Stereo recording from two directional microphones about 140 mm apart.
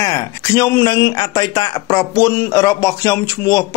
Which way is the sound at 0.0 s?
25° left (ahead or behind).